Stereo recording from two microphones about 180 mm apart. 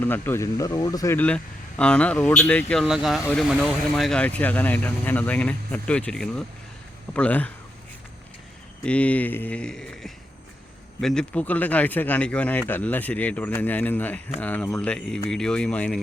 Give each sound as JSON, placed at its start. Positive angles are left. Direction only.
{"t": 0.0, "sound": "speech", "side_deg": 10}
{"t": 8.8, "sound": "speech", "side_deg": 5}